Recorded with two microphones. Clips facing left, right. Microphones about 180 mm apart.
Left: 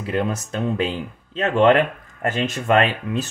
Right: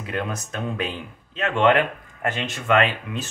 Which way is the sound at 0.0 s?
30° left (ahead or behind).